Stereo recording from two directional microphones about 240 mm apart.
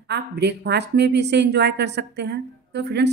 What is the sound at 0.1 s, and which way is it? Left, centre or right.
Speech, right.